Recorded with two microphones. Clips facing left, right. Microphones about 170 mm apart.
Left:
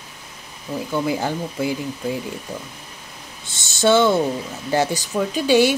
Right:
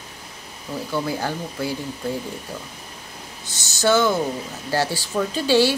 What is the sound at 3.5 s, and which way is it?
Speech, 25° left (ahead or behind).